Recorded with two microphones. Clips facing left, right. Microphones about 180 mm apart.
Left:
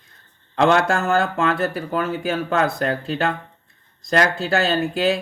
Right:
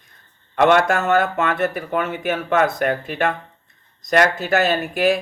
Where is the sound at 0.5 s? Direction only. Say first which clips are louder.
Right 2 dB; 25° left (ahead or behind).